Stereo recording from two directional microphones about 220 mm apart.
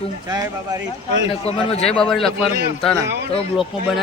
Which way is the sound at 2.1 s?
Centre (ahead or behind).